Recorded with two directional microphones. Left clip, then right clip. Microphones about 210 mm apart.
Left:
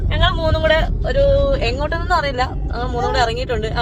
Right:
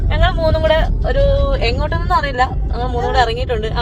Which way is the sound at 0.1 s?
10° left (ahead or behind).